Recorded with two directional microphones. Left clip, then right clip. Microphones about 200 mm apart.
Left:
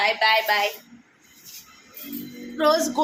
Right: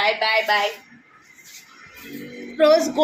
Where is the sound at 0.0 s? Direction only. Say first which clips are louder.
Even; 20° right (ahead or behind).